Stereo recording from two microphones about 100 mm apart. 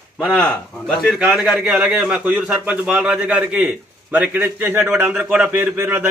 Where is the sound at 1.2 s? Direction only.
5° right (ahead or behind).